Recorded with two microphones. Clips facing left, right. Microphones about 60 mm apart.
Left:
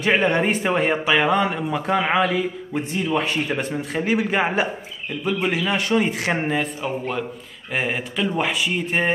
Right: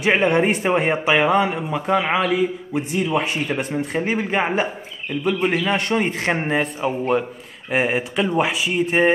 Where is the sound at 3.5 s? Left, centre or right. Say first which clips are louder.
Right 1 dB; centre.